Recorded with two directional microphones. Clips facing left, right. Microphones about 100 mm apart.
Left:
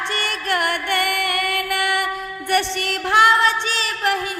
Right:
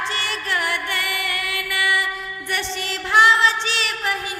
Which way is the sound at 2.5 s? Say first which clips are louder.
Left 7 dB; 60° left (ahead or behind).